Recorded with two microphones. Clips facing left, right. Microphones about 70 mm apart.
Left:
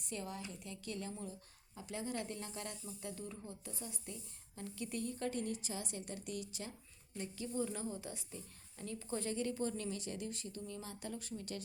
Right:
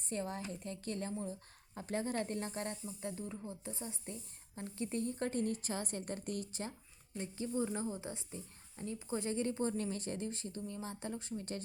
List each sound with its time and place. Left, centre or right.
0.0 s speech: right
9.3 s speech: right